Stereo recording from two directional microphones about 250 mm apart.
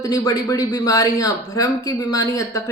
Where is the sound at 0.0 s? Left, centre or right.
Centre.